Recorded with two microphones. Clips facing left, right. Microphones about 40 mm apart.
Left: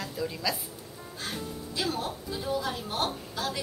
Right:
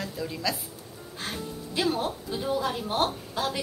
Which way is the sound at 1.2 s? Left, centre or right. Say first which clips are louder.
Right 1 dB; right.